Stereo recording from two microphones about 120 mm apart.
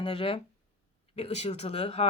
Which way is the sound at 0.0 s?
50° left (ahead or behind).